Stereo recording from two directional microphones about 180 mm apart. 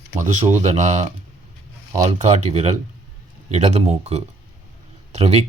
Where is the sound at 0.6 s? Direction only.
40° right (ahead or behind).